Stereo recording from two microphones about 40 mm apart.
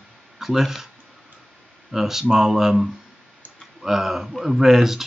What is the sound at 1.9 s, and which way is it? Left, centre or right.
Speech, centre.